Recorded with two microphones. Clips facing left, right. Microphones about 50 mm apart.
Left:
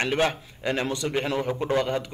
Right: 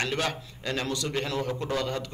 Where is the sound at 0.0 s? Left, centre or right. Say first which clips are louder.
Left 5 dB; left.